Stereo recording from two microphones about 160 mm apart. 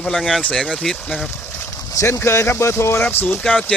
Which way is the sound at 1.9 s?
20° left (ahead or behind).